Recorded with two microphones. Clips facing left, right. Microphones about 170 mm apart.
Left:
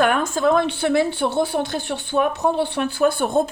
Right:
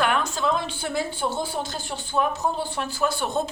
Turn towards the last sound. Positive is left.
turn(degrees=50)  # may be behind; listen again after turning